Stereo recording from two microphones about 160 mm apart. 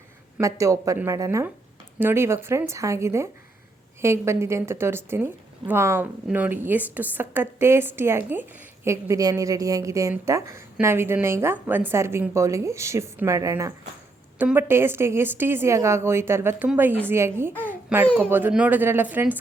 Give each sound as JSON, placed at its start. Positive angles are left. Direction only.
{"t": 0.3, "sound": "a woman's voice", "side_deg": -20}
{"t": 17.7, "sound": "babbling", "side_deg": -10}
{"t": 18.2, "sound": "a woman's voice", "side_deg": -10}